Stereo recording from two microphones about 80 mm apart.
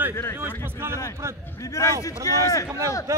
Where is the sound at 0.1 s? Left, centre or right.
Left.